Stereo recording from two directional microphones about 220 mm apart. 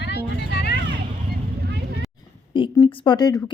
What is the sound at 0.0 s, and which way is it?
Vehicle, 50° left (ahead or behind).